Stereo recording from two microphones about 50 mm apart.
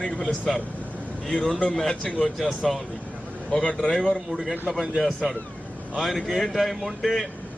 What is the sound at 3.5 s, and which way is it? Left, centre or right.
Speech, centre.